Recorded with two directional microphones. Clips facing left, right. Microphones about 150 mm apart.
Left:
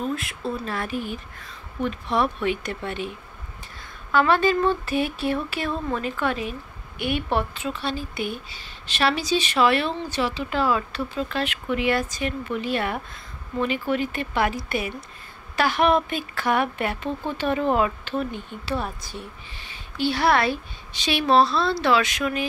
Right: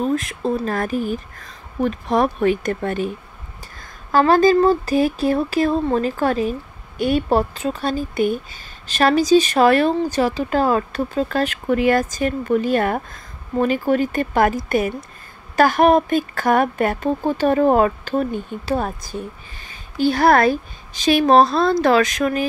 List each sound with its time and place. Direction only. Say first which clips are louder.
0.0 s speech: right 7 dB; 40° right (ahead or behind)